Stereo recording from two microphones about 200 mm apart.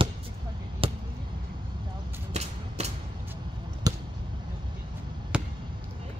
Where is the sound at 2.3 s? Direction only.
35° right (ahead or behind).